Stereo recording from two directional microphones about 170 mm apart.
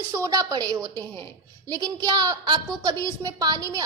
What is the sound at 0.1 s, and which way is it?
A woman's voice, 15° right (ahead or behind).